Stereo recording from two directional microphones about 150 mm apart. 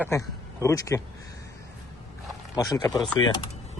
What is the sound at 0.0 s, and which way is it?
Speech, 20° left (ahead or behind).